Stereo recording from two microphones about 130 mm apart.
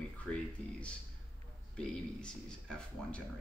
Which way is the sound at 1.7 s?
5° left (ahead or behind).